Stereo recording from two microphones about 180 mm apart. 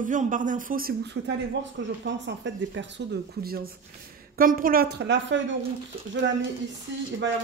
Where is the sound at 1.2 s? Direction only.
65° right (ahead or behind).